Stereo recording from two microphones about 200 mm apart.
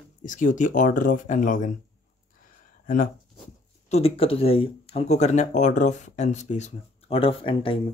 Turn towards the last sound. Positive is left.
turn(degrees=25)  # may be behind; listen again after turning